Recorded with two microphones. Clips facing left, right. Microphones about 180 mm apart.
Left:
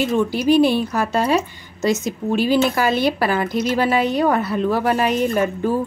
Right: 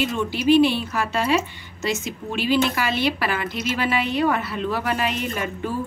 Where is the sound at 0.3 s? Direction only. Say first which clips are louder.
Right 1 dB; 40° left (ahead or behind).